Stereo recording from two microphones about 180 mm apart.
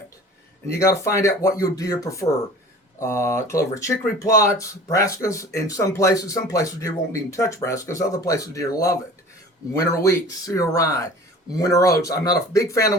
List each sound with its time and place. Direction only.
0.7 s speech: 15° left (ahead or behind)